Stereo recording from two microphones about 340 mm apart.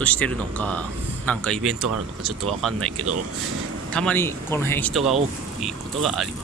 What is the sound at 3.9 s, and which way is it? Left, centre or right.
Speech, centre.